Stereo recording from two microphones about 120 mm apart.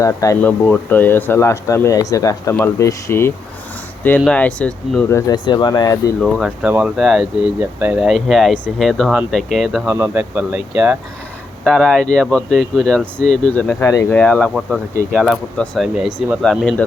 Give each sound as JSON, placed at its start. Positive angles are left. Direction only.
{"t": 0.0, "sound": "speech", "side_deg": 30}
{"t": 0.4, "sound": "speech", "side_deg": 15}
{"t": 4.3, "sound": "speech", "side_deg": 10}
{"t": 5.3, "sound": "speech", "side_deg": 35}
{"t": 6.3, "sound": "speech", "side_deg": 0}
{"t": 7.6, "sound": "speech", "side_deg": -15}
{"t": 8.0, "sound": "speech", "side_deg": 0}
{"t": 9.9, "sound": "speech", "side_deg": -20}
{"t": 10.3, "sound": "speech", "side_deg": -10}
{"t": 11.6, "sound": "speech", "side_deg": 5}
{"t": 15.1, "sound": "speech", "side_deg": -5}
{"t": 15.5, "sound": "speech", "side_deg": 10}
{"t": 15.8, "sound": "speech", "side_deg": -5}